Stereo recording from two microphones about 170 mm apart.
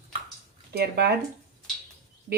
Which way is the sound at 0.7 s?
70° right (ahead or behind).